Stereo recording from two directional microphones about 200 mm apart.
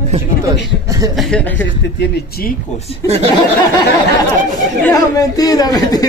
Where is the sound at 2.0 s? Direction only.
50° left (ahead or behind).